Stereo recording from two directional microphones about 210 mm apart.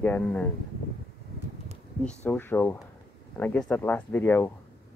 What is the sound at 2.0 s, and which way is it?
Speech, 5° left (ahead or behind).